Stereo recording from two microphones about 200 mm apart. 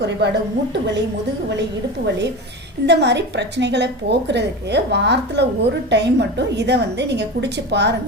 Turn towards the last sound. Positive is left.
turn(degrees=-60)  # may be behind; listen again after turning